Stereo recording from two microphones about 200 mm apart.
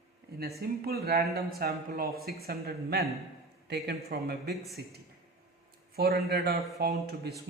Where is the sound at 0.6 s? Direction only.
50° right (ahead or behind).